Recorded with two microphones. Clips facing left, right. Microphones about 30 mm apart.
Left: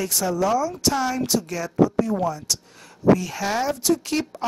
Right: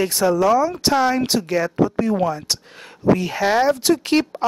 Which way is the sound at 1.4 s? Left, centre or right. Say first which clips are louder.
Right 8 dB; right.